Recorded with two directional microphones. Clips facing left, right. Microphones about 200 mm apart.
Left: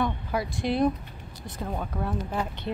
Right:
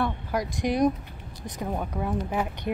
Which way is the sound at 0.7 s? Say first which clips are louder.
Right 1 dB; 15° right (ahead or behind).